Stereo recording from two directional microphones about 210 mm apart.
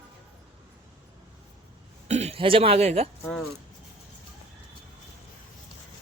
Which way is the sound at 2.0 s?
30° right (ahead or behind).